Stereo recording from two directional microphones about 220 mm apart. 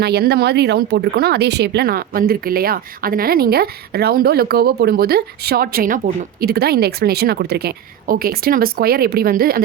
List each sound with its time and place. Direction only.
0.0 s speech: 45° right (ahead or behind)